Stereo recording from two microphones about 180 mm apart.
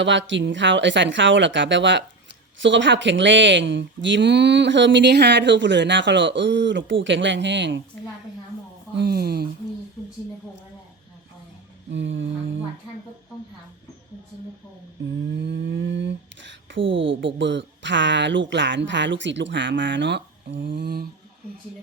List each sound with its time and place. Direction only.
0.0 s speech: 90° right
9.0 s speech: 60° right (ahead or behind)
11.9 s speech: 90° right
15.3 s a sound: 75° right (ahead or behind); by 16.8 s 90° right
17.2 s speech: 85° right; by 21.1 s 60° right (ahead or behind)